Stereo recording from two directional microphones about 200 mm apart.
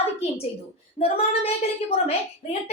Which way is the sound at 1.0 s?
30° left (ahead or behind).